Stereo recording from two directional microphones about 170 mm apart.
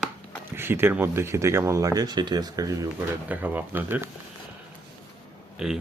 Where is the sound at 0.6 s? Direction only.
15° right (ahead or behind).